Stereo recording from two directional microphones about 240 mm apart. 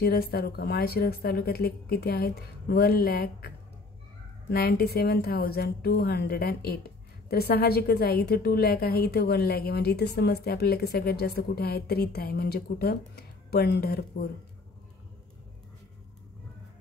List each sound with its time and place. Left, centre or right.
0.0 s a woman's voice: left